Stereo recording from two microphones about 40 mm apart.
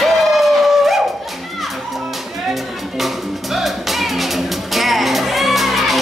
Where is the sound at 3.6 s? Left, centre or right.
Centre.